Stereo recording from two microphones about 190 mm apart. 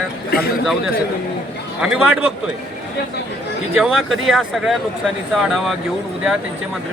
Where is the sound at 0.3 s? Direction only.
55° left (ahead or behind).